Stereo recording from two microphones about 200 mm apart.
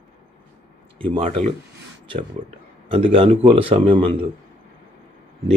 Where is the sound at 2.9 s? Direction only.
25° right (ahead or behind).